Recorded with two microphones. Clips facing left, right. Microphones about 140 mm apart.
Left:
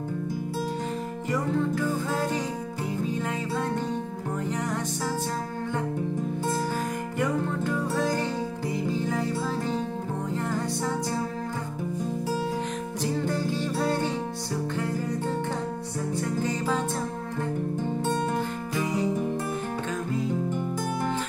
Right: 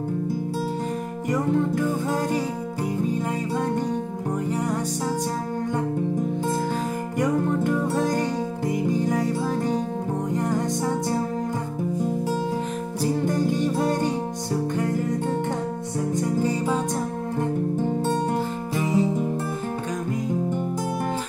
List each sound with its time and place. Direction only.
1.3 s music: 20° right (ahead or behind)
4.5 s music: 10° right (ahead or behind)
7.2 s music: 20° right (ahead or behind)
13.2 s music: 15° right (ahead or behind)
16.1 s music: 15° right (ahead or behind)
18.8 s music: centre (ahead or behind)